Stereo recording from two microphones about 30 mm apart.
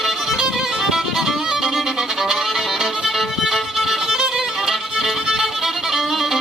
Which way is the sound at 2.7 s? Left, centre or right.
Centre.